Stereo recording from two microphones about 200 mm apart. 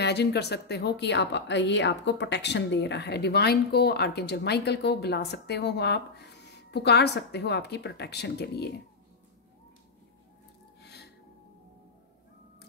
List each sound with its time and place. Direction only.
0.0 s speech: 55° left (ahead or behind)
10.8 s gasp: 55° left (ahead or behind)